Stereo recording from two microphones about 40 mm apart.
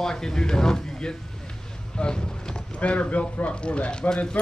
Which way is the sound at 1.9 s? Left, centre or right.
Left.